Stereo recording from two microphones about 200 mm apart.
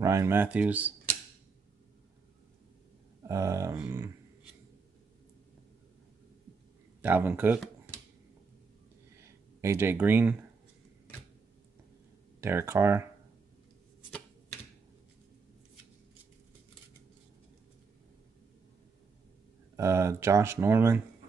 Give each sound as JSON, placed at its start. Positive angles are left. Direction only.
{"t": 0.0, "sound": "speech", "side_deg": -15}
{"t": 3.3, "sound": "speech", "side_deg": -15}
{"t": 7.0, "sound": "speech", "side_deg": -10}
{"t": 9.6, "sound": "speech", "side_deg": -15}
{"t": 12.4, "sound": "speech", "side_deg": -10}
{"t": 19.8, "sound": "speech", "side_deg": -15}